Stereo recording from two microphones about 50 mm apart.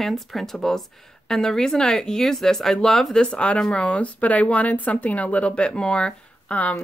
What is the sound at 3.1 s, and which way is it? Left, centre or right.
Speech, left.